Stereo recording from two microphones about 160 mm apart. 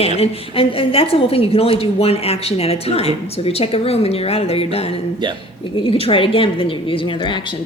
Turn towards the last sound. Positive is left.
turn(degrees=30)  # may be behind; listen again after turning